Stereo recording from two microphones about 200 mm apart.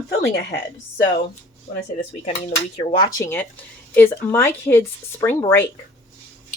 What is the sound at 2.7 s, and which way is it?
Speech, 20° left (ahead or behind).